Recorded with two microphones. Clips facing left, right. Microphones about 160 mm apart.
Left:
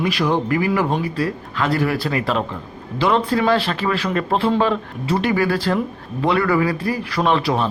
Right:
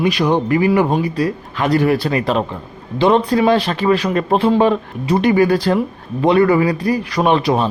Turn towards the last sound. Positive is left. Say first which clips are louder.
# right 4 dB
turn(degrees=-20)  # may be behind; listen again after turning